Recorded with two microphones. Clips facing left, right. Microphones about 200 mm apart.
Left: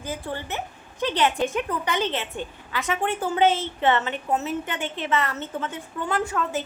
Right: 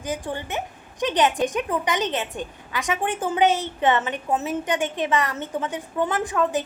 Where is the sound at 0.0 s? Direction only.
15° right (ahead or behind).